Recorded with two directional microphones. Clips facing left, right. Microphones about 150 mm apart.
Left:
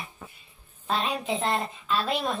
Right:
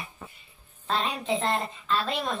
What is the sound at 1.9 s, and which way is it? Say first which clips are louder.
Speech: even; 10° left (ahead or behind).